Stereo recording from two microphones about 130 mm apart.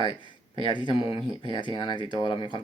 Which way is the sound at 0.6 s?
35° left (ahead or behind).